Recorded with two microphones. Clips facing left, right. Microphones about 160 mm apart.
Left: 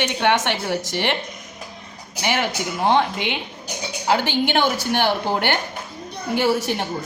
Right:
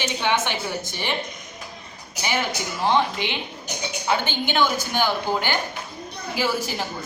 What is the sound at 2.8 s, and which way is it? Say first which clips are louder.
Speech: left 2 dB; 60° left (ahead or behind).